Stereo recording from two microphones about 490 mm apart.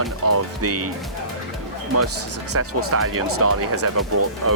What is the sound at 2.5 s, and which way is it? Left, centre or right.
Speech, right.